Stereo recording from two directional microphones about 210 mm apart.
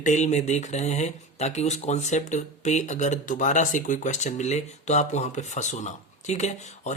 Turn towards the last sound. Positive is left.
turn(degrees=35)  # may be behind; listen again after turning